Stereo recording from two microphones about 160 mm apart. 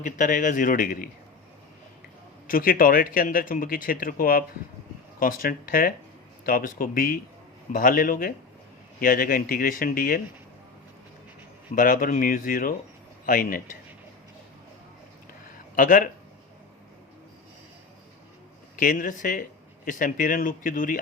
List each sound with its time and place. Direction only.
0.0 s speech: 55° left (ahead or behind)
2.5 s speech: 60° left (ahead or behind)
11.7 s speech: 60° left (ahead or behind)
15.7 s speech: 60° left (ahead or behind)
18.8 s speech: 60° left (ahead or behind)